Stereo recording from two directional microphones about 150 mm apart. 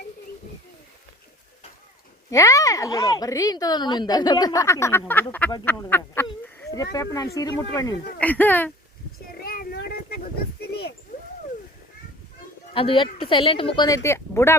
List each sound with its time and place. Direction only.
2.3 s a woman's voice: 20° left (ahead or behind)
8.2 s speech: 10° left (ahead or behind)
9.4 s a sound: 85° left
12.7 s speech: 35° left (ahead or behind)
13.8 s a woman's voice: 20° left (ahead or behind)